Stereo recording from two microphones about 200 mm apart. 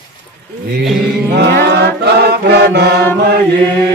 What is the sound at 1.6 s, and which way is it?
Music, 55° right (ahead or behind).